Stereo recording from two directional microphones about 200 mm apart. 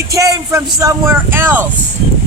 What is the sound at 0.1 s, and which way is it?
Speech, 15° right (ahead or behind).